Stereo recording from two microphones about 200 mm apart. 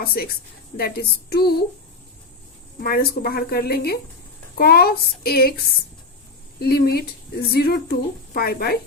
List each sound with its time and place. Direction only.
0.0 s speech: 50° left (ahead or behind)
2.8 s speech: 50° left (ahead or behind)
6.6 s speech: 50° left (ahead or behind)